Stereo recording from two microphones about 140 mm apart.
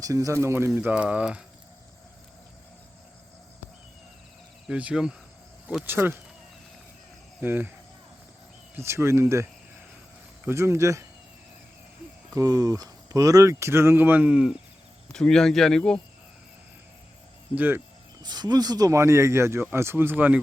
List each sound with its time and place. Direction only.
0.0 s speech: 25° right (ahead or behind); by 1.5 s 5° right (ahead or behind)
4.6 s speech: 5° right (ahead or behind)
7.4 s speech: 15° right (ahead or behind)
8.7 s speech: 20° right (ahead or behind)
12.3 s speech: 25° right (ahead or behind); by 14.5 s 5° right (ahead or behind)
15.1 s speech: 5° left (ahead or behind)
17.5 s speech: 15° right (ahead or behind)
18.2 s speech: 30° right (ahead or behind); by 20.4 s 15° right (ahead or behind)